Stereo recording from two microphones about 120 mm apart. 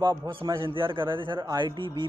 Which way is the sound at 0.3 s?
40° right (ahead or behind).